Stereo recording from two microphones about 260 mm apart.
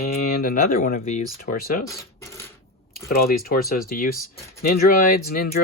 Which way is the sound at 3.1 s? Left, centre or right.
Left.